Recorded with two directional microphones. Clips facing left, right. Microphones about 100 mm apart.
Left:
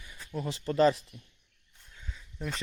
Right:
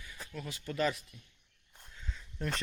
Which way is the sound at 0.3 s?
30° left (ahead or behind).